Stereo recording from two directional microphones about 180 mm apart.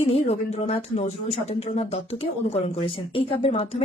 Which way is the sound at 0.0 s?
35° left (ahead or behind).